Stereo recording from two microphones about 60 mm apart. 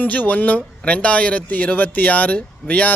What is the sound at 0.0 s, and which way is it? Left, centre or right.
Speech, left.